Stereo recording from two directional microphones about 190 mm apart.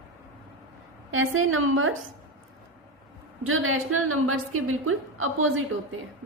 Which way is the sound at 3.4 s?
90° right.